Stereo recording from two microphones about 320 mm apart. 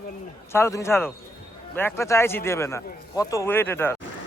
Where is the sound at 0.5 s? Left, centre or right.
Centre.